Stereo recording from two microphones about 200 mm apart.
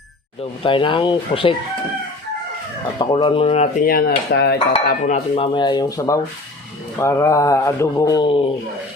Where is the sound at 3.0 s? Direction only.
25° left (ahead or behind).